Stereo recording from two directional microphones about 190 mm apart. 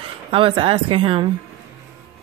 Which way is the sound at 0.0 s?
30° right (ahead or behind).